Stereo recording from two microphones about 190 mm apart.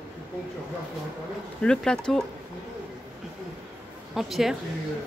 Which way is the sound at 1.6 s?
5° left (ahead or behind).